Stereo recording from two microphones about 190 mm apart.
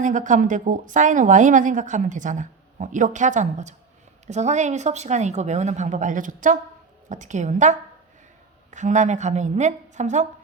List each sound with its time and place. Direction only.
0.0 s speech: 40° right (ahead or behind)